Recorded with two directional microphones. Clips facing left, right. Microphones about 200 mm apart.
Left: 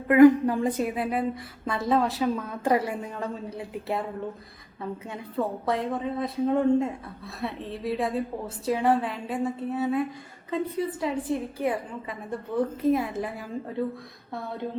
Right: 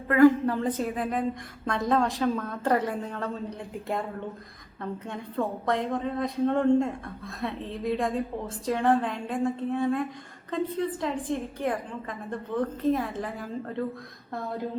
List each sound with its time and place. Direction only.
0.1 s a woman's voice: 15° left (ahead or behind)
4.8 s a woman's voice: 5° left (ahead or behind)